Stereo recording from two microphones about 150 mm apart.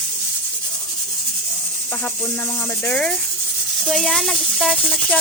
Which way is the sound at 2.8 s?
10° left (ahead or behind).